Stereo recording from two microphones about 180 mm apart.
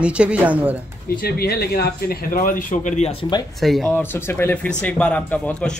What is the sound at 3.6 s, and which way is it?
A man's voice, centre (ahead or behind).